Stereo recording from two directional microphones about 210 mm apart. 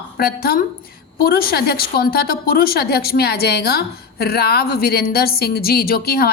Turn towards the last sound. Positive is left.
turn(degrees=45)  # may be behind; listen again after turning